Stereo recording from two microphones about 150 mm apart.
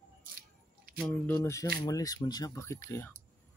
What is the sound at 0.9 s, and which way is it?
Speech, 10° left (ahead or behind).